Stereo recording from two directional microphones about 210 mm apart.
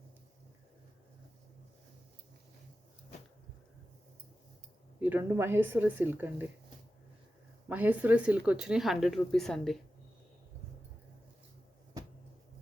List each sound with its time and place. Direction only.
4.9 s speech: 10° right (ahead or behind)
7.7 s speech: 10° right (ahead or behind)